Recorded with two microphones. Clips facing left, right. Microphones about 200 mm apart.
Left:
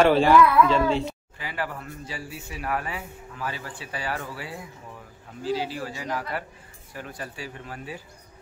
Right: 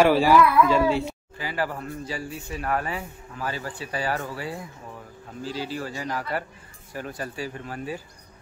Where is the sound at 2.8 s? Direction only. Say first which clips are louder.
Right 3 dB; 40° right (ahead or behind).